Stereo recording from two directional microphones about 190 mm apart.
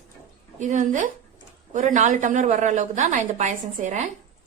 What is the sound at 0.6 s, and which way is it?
A woman's voice, 40° right (ahead or behind).